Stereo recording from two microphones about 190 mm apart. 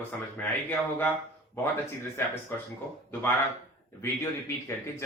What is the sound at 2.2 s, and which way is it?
Speech, 15° left (ahead or behind).